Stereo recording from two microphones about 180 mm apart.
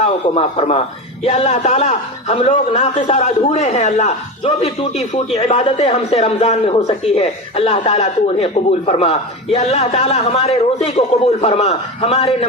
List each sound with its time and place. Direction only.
0.0 s a man's voice: 35° left (ahead or behind)